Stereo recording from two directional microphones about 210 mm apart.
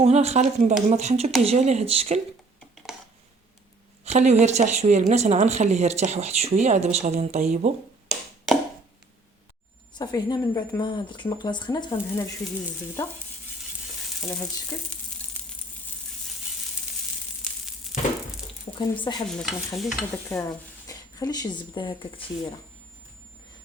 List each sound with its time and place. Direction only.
0.0 s speech: 30° right (ahead or behind)
4.0 s speech: 30° right (ahead or behind)
8.0 s tap: centre (ahead or behind)
9.9 s speech: 20° left (ahead or behind)
14.7 s speech: 15° left (ahead or behind)
17.9 s a sound: centre (ahead or behind)
18.8 s speech: 20° left (ahead or behind)
19.3 s stir: centre (ahead or behind)
20.3 s speech: 15° left (ahead or behind)